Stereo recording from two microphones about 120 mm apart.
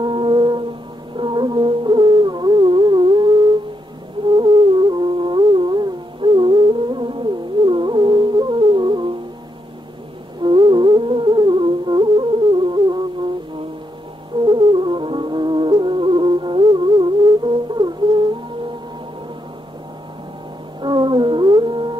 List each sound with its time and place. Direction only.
0.0 s music: 40° right (ahead or behind)
4.4 s music: 40° right (ahead or behind)
10.4 s music: 40° right (ahead or behind)
14.4 s music: 40° right (ahead or behind)
20.8 s music: 40° right (ahead or behind)